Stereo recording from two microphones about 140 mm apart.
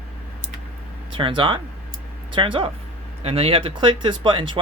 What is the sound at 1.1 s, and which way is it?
Speech, 40° right (ahead or behind).